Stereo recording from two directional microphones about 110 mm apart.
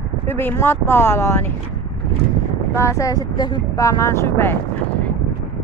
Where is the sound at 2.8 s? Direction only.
30° left (ahead or behind).